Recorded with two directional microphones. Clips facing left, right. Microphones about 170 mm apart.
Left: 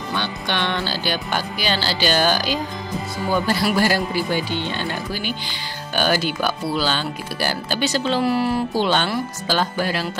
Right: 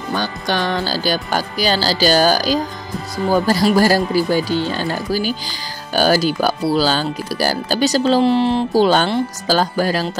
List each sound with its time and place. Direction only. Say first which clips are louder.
0.1 s speech: right 5 dB; 40° right (ahead or behind)
8.2 s speech: right 5 dB; 25° right (ahead or behind)
8.7 s speech: right 6 dB; 40° right (ahead or behind)